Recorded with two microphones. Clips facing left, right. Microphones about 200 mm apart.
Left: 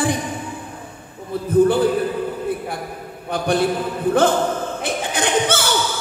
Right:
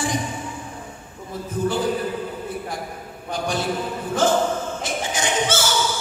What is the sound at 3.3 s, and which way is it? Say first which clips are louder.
Speech: left 6 dB; 60° left (ahead or behind).